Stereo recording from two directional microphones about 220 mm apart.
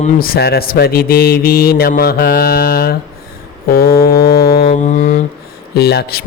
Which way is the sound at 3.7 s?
45° left (ahead or behind).